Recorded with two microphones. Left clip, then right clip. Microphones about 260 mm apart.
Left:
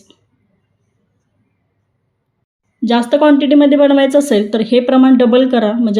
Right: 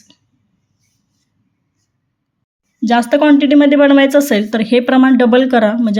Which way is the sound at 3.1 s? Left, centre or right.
Right.